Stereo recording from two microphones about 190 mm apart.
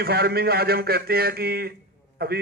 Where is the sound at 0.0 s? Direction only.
55° right (ahead or behind).